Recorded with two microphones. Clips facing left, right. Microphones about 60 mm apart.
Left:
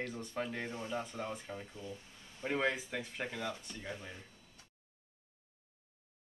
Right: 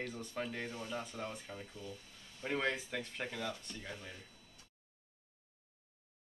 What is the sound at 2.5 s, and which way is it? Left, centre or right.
Speech, centre.